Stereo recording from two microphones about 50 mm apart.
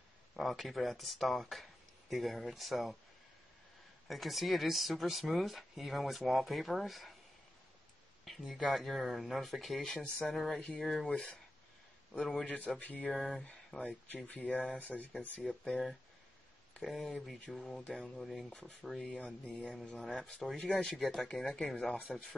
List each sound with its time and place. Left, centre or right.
0.4 s speech: centre
4.1 s speech: centre
8.4 s speech: centre
12.1 s speech: centre
12.7 s speech: left
13.1 s speech: centre
13.4 s speech: left
15.7 s speech: centre
17.7 s speech: centre
18.2 s speech: centre
21.5 s speech: centre